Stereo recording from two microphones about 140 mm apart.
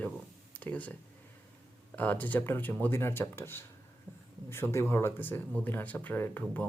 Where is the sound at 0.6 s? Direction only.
10° left (ahead or behind).